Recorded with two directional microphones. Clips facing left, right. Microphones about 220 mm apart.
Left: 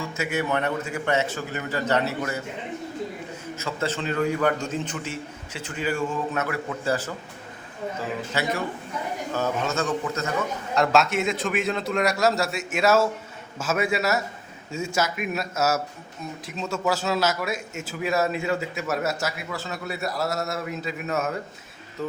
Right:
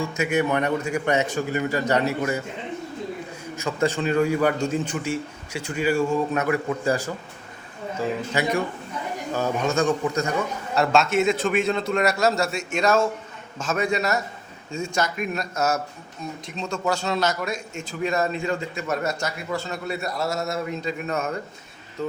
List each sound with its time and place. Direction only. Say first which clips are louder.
0.2 s a man's voice: right 3 dB; 15° right (ahead or behind)
3.5 s a man's voice: right 5 dB; 15° right (ahead or behind)
8.4 s a man's voice: right 2 dB; 15° right (ahead or behind)
10.8 s a man's voice: right 1 dB; centre (ahead or behind)